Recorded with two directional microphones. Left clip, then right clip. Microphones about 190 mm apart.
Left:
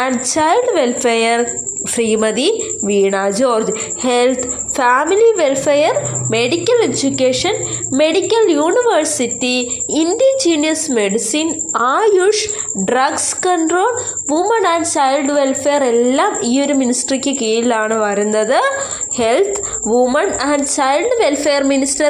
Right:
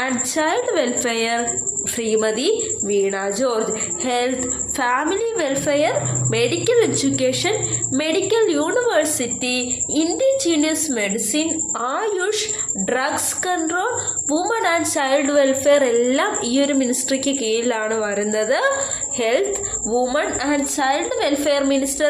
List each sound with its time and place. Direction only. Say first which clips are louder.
0.3 s a woman's voice: left 8 dB; 25° left (ahead or behind)